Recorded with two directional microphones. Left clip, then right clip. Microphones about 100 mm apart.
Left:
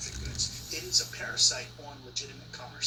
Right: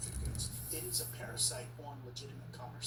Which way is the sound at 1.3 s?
25° right (ahead or behind).